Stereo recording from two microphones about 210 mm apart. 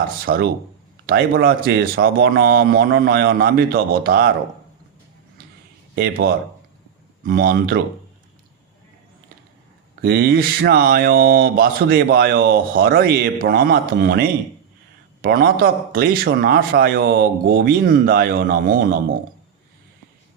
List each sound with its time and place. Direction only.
0.3 s a man's voice: 45° right (ahead or behind)
6.0 s a man's voice: 45° right (ahead or behind)
10.0 s a man's voice: 45° right (ahead or behind)